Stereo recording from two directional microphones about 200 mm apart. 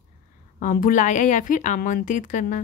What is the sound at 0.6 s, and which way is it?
Speech, 45° left (ahead or behind).